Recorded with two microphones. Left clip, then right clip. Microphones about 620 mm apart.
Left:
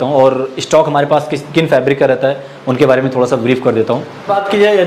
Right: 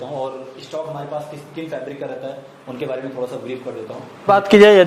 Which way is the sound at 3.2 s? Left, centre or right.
Left.